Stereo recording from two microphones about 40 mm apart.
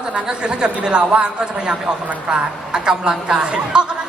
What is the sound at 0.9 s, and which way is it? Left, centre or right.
A woman's voice, right.